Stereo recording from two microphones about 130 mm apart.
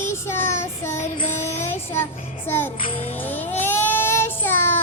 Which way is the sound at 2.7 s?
45° left (ahead or behind).